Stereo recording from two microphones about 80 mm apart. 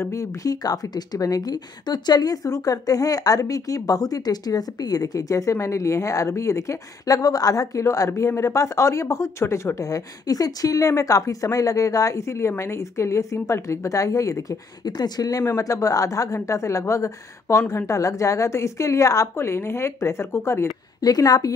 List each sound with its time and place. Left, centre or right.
0.0 s a woman's voice: left
21.0 s speech: left